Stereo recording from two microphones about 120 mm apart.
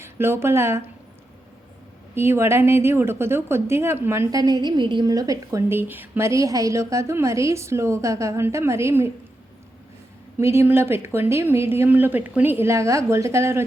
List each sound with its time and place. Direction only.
0.0 s speech: 20° right (ahead or behind)
2.1 s a woman's voice: 20° right (ahead or behind)
4.3 s a woman's voice: 30° right (ahead or behind)
10.3 s a woman's voice: 20° right (ahead or behind)